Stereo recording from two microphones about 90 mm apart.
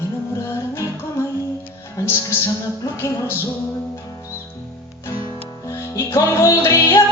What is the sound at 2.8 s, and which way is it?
Music, 30° left (ahead or behind).